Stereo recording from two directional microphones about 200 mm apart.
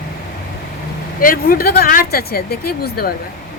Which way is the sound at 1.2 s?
45° left (ahead or behind).